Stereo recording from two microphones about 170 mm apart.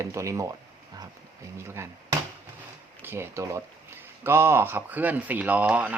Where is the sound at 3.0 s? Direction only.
15° right (ahead or behind).